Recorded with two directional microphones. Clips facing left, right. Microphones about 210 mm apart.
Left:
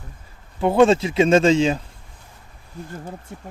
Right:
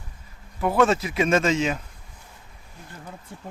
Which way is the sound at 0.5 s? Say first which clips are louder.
Left 5 dB; 25° left (ahead or behind).